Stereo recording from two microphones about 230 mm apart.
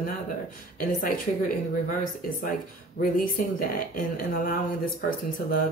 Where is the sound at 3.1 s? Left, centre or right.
Left.